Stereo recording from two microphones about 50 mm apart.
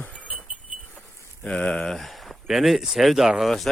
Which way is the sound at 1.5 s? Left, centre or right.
Left.